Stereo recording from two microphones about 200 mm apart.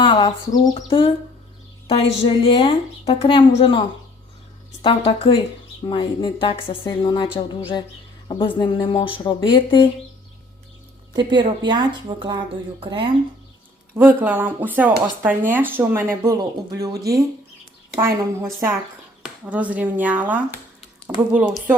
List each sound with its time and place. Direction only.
0.0 s speech: 25° left (ahead or behind)
11.1 s a woman's voice: 20° right (ahead or behind)
13.9 s speech: 10° right (ahead or behind)